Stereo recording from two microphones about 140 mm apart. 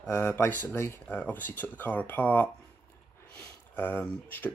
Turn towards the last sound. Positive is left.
turn(degrees=10)  # may be behind; listen again after turning